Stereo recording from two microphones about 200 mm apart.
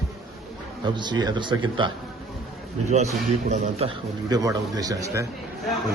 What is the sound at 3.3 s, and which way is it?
Speech, 35° right (ahead or behind).